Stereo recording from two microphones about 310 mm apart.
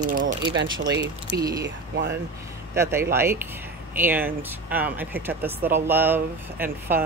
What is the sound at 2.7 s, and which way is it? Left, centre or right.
Speech, centre.